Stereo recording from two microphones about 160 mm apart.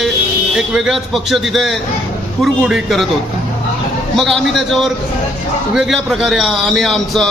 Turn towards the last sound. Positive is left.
turn(degrees=0)  # may be behind; listen again after turning